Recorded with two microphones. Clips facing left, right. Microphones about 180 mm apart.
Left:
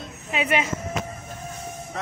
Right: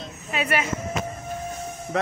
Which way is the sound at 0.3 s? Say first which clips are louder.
Left 1 dB; 20° left (ahead or behind).